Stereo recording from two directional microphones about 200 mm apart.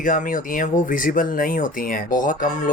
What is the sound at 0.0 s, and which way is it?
Speech, 40° left (ahead or behind).